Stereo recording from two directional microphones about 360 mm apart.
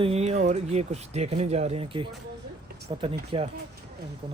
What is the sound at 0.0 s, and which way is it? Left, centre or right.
Speech, centre.